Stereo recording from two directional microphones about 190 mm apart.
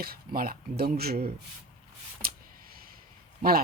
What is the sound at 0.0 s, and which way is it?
Speech, 50° right (ahead or behind).